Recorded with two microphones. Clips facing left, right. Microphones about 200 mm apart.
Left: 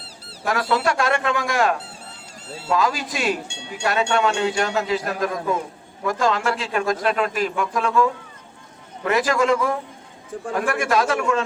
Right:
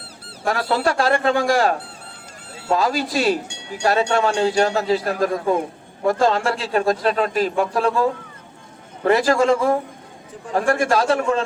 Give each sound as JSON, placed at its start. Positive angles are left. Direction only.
{"t": 0.4, "sound": "speech", "side_deg": -30}
{"t": 2.7, "sound": "speech", "side_deg": -35}